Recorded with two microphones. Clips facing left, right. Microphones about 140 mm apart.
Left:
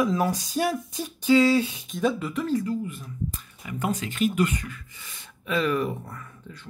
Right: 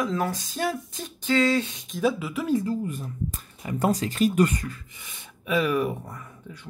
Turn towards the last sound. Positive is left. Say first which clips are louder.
# right 1 dB
turn(degrees=-10)  # may be behind; listen again after turning